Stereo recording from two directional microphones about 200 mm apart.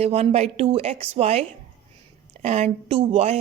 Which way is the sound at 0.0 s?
30° right (ahead or behind).